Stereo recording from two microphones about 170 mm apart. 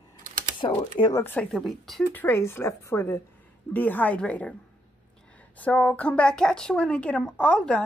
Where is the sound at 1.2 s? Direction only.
5° left (ahead or behind).